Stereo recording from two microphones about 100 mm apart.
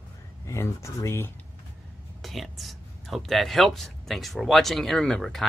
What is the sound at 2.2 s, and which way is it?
Speech, centre (ahead or behind).